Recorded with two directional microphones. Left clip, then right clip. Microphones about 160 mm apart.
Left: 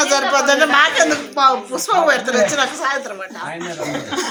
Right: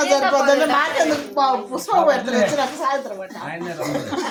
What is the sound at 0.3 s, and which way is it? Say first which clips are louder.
A woman's voice: left 3 dB; 35° right (ahead or behind).